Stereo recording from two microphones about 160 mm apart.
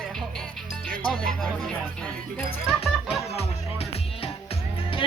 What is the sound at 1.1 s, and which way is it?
Music, 5° right (ahead or behind).